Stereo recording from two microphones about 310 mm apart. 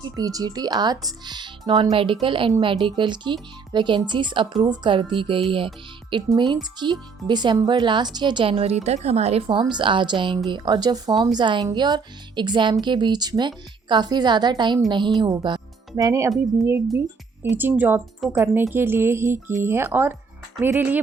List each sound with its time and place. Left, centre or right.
0.0 s a woman's voice: centre